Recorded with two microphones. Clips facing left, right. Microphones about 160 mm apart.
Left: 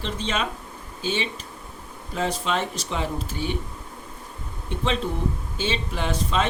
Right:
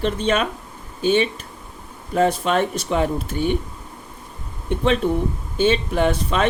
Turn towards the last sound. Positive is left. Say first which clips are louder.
# right 6 dB
turn(degrees=-60)  # may be behind; listen again after turning